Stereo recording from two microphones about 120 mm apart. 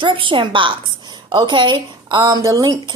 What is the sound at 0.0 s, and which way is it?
A woman's voice, 45° right (ahead or behind).